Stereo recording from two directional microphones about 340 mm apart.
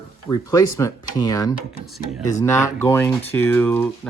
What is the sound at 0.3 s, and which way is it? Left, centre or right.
Speech, centre.